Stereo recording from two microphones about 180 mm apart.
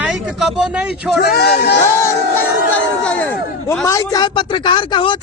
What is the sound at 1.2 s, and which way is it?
Speech, 60° left (ahead or behind).